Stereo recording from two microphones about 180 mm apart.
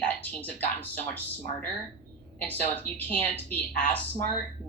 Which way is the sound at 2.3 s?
10° left (ahead or behind).